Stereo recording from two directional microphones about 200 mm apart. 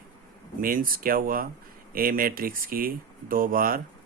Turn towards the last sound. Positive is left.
turn(degrees=-45)  # may be behind; listen again after turning